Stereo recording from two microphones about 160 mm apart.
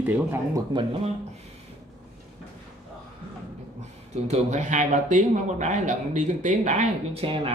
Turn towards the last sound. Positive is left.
turn(degrees=-35)  # may be behind; listen again after turning